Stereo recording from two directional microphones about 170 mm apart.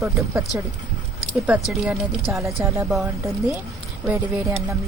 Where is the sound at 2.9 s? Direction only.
Centre (ahead or behind).